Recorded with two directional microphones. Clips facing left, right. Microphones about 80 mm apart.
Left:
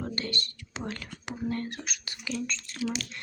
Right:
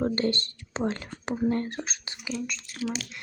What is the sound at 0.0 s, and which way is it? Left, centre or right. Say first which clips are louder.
Speech: right 8 dB; right.